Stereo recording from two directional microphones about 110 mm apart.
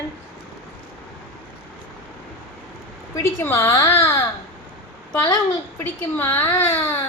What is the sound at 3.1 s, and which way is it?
A woman's voice, 25° left (ahead or behind).